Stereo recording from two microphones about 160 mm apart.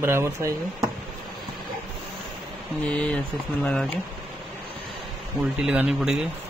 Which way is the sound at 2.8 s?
10° left (ahead or behind).